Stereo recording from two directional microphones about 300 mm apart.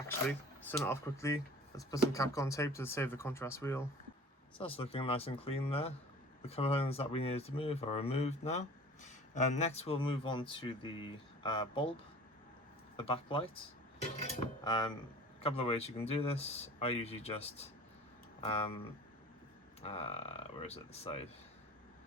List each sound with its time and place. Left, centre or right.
0.3 s speech: centre
13.0 s speech: centre
19.8 s speech: centre